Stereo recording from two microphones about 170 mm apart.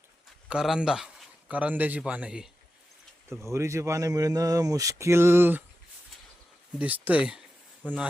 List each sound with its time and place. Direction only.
0.4 s a man's voice: 5° right (ahead or behind)
3.2 s speech: 15° right (ahead or behind)
6.7 s speech: 10° right (ahead or behind)